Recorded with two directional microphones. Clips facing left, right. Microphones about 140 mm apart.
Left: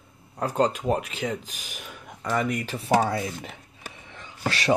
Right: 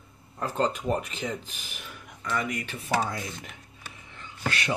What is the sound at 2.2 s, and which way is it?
Speech, 35° left (ahead or behind).